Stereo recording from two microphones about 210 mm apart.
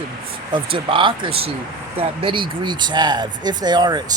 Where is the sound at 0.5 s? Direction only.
25° right (ahead or behind).